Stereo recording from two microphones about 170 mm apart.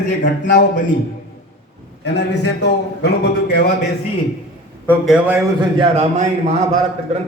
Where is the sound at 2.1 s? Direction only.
90° left.